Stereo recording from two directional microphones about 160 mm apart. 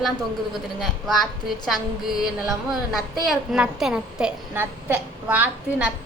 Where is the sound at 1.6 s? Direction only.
Centre (ahead or behind).